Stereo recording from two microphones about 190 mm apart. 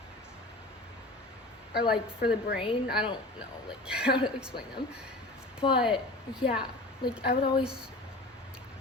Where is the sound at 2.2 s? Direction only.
55° left (ahead or behind).